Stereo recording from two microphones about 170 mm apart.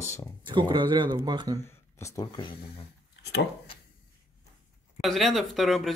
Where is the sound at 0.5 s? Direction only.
30° right (ahead or behind).